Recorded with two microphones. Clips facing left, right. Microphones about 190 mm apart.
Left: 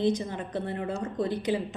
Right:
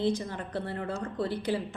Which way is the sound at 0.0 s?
20° left (ahead or behind).